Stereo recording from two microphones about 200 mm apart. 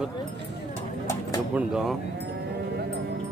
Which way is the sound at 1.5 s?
Centre (ahead or behind).